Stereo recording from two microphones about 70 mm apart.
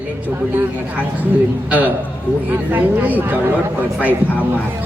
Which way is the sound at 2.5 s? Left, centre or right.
Right.